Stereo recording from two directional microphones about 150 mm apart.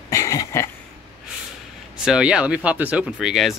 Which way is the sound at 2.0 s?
5° right (ahead or behind).